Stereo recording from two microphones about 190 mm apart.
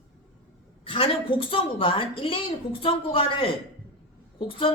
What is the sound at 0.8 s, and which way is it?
A woman's voice, 30° left (ahead or behind).